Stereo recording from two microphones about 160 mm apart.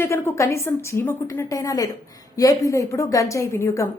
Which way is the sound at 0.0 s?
15° left (ahead or behind).